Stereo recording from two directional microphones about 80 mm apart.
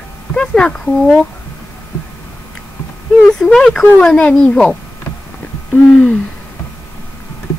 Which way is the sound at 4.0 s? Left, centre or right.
Centre.